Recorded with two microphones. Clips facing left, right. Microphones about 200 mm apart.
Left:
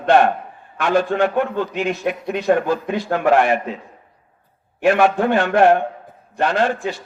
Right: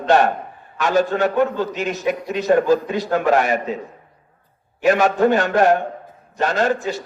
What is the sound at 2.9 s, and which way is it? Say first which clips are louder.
Speech: left 1 dB; 40° right (ahead or behind).